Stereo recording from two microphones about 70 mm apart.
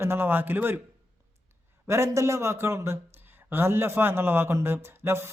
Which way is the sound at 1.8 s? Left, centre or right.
Right.